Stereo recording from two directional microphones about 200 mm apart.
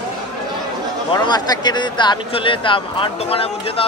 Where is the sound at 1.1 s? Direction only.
20° left (ahead or behind).